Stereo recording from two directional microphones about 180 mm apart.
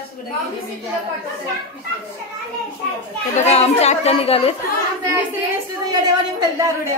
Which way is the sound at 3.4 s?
35° left (ahead or behind).